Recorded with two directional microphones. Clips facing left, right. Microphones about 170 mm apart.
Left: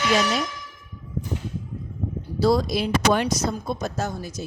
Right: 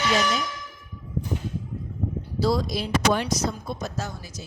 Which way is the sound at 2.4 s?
60° left (ahead or behind).